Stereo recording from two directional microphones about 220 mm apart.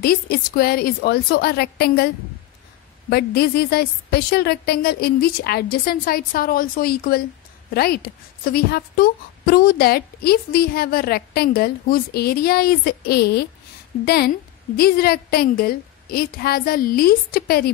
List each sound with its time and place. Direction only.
0.0 s a woman's voice: 45° left (ahead or behind)
3.1 s a woman's voice: 45° left (ahead or behind)